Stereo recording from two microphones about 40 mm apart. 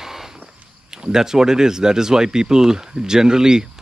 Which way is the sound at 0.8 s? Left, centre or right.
Centre.